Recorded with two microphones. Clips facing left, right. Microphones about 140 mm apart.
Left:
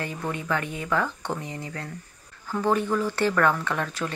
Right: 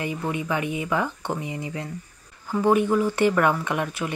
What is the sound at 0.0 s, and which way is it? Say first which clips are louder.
Speech: right 3 dB; 10° right (ahead or behind).